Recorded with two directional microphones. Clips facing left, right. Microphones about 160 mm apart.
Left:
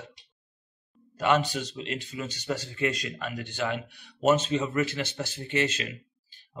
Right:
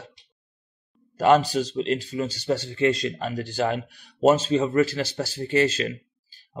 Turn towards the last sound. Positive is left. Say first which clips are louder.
# right 5 dB
turn(degrees=-35)  # may be behind; listen again after turning